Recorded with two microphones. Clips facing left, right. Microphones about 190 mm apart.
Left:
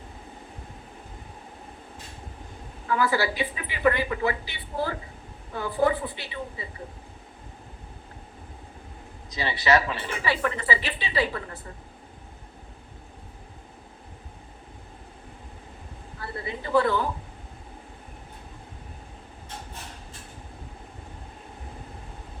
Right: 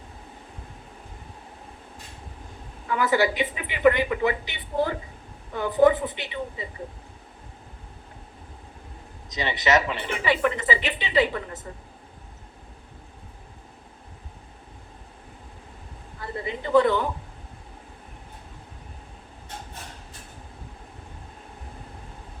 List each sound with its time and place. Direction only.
2.9 s speech: 20° right (ahead or behind)
9.3 s speech: 20° right (ahead or behind)
16.2 s a woman's voice: 20° right (ahead or behind)